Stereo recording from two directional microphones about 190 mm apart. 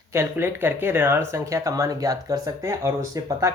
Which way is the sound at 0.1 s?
15° right (ahead or behind).